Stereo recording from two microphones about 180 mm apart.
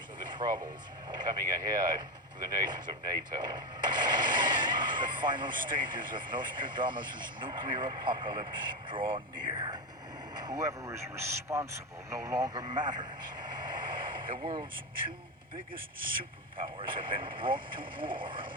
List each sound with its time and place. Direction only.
0.3 s speech: 20° right (ahead or behind)
16.6 s speech: 30° right (ahead or behind)